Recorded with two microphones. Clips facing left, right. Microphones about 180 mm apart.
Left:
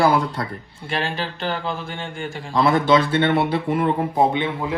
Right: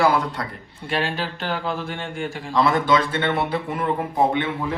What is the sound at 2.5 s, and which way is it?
Speech, 30° left (ahead or behind).